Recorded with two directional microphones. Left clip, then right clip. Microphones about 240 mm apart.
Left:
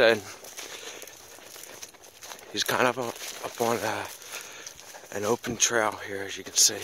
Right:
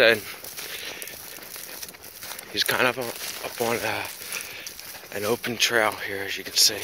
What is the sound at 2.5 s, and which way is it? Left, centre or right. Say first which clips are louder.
Speech: right 2 dB; centre.